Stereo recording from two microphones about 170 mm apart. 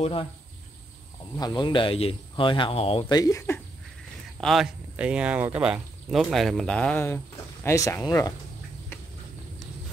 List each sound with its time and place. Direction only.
0.0 s speech: 30° left (ahead or behind)
1.3 s speech: 25° left (ahead or behind)
4.4 s speech: centre (ahead or behind); by 8.3 s 20° left (ahead or behind)